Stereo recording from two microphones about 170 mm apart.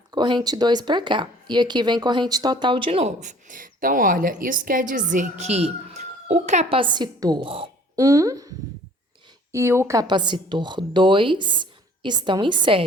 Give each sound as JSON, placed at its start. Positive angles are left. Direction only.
{"t": 0.1, "sound": "a woman's voice", "side_deg": -25}
{"t": 8.0, "sound": "a woman's voice", "side_deg": -20}